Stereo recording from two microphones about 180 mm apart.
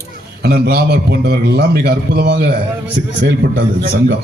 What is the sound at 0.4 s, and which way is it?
A man's voice, 60° right (ahead or behind).